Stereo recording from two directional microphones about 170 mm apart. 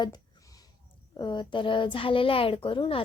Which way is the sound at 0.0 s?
20° left (ahead or behind).